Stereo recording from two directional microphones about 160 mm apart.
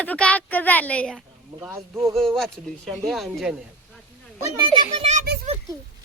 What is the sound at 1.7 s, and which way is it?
Speech, 15° right (ahead or behind).